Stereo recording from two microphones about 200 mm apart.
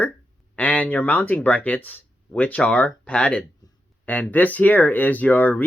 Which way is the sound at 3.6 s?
20° left (ahead or behind).